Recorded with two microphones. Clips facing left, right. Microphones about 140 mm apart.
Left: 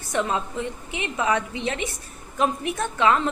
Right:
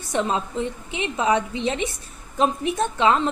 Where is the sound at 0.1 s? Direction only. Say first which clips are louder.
Right 1 dB; 20° right (ahead or behind).